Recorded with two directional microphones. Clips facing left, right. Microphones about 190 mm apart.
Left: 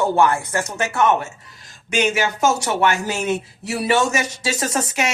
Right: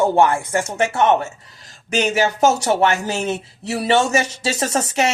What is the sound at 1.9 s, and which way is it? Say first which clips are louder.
Speech: right 2 dB; 40° right (ahead or behind).